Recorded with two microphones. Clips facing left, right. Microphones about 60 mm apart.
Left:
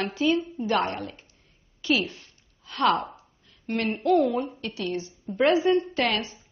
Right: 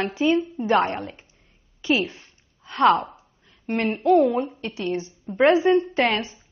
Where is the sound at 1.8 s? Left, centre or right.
Right.